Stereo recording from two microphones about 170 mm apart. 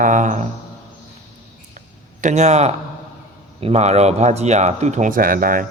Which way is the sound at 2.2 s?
45° right (ahead or behind).